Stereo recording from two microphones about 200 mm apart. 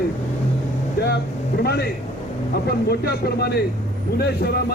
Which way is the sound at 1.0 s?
55° left (ahead or behind).